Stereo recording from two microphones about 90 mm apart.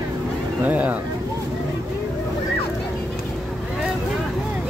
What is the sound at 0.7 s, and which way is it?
Speech, 15° right (ahead or behind).